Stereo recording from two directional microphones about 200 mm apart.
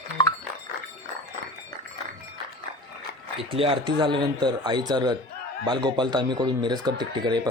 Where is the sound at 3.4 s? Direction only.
25° right (ahead or behind).